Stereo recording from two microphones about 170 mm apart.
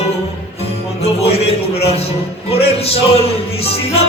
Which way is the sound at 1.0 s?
35° left (ahead or behind).